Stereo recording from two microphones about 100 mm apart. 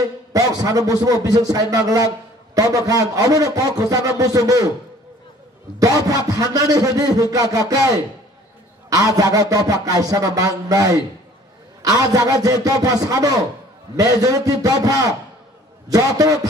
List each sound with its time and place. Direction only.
0.3 s a man's voice: 35° right (ahead or behind)
5.8 s a man's voice: 35° right (ahead or behind)
8.9 s a man's voice: 35° right (ahead or behind)